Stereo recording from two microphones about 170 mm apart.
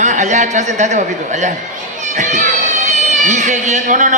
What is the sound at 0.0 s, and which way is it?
A woman's voice, 45° right (ahead or behind).